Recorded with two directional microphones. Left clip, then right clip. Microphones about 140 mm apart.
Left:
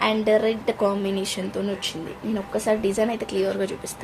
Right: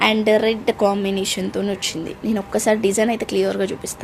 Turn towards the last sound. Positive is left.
turn(degrees=-40)  # may be behind; listen again after turning